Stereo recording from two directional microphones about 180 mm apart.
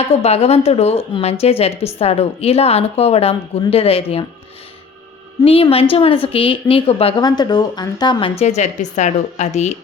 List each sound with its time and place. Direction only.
0.1 s a woman's voice: 35° left (ahead or behind)
5.5 s a woman's voice: 30° left (ahead or behind)